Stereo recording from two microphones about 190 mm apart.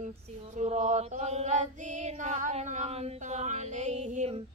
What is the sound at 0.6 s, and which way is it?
Chant, 40° right (ahead or behind).